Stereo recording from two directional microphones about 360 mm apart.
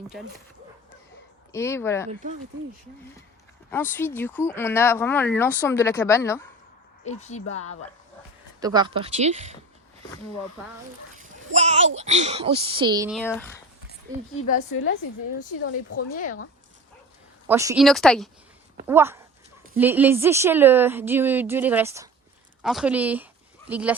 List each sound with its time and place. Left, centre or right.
1.5 s speech: centre
3.7 s speech: centre
7.0 s a woman's voice: centre
8.6 s speech: centre
11.5 s a child's voice: centre
15.6 s speech: left
17.5 s a woman's voice: centre